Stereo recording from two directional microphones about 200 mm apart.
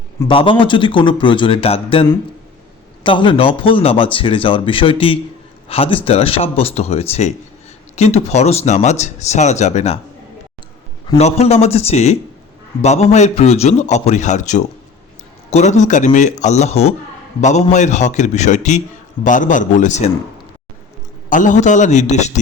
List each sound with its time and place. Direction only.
0.3 s a man's voice: 25° left (ahead or behind)
11.2 s speech: 30° left (ahead or behind)
21.2 s speech: 40° left (ahead or behind)